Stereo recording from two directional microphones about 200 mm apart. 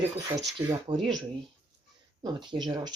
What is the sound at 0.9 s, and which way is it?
Speech, 25° right (ahead or behind).